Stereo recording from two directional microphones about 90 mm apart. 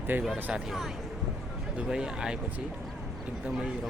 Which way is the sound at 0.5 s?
Centre (ahead or behind).